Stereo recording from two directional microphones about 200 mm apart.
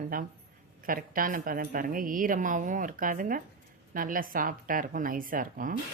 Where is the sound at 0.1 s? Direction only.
45° right (ahead or behind).